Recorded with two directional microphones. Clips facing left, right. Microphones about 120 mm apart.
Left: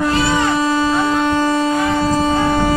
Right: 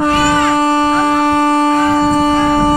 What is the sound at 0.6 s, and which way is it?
Wind instrument, 45° right (ahead or behind).